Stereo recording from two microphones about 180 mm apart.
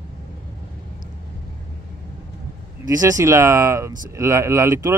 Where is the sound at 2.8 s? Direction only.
20° right (ahead or behind).